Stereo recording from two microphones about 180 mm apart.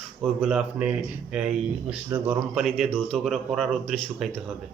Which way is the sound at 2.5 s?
Centre (ahead or behind).